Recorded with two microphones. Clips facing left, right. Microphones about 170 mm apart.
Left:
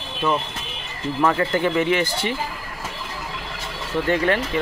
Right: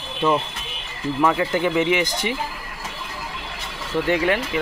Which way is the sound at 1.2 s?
10° right (ahead or behind).